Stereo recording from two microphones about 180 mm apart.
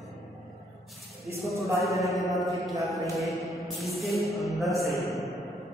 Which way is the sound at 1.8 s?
Centre (ahead or behind).